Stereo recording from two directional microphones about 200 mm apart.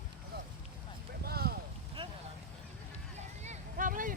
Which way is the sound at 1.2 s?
50° right (ahead or behind).